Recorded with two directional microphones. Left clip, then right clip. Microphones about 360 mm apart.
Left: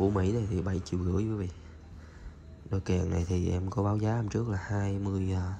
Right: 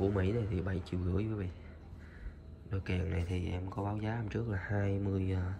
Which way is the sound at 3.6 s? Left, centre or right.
Right.